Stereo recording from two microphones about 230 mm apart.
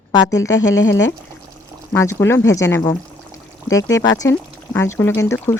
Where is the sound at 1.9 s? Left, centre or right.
Centre.